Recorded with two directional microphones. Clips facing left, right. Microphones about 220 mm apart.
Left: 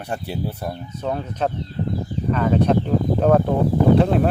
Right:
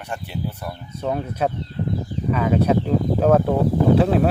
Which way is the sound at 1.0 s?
5° right (ahead or behind).